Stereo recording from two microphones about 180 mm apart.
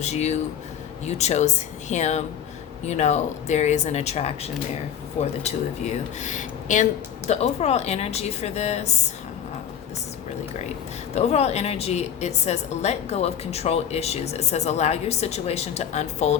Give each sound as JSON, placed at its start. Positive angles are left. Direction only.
{"t": 0.0, "sound": "a woman's voice", "side_deg": 40}
{"t": 11.1, "sound": "a woman's voice", "side_deg": 35}